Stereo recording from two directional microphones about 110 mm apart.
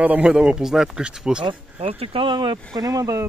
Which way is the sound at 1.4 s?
55° right (ahead or behind).